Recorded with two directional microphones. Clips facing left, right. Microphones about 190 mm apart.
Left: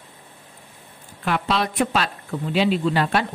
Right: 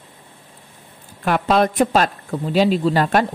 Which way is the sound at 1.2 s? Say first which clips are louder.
Right 6 dB; 45° right (ahead or behind).